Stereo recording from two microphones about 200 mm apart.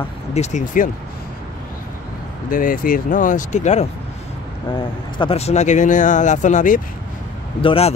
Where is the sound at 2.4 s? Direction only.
45° left (ahead or behind).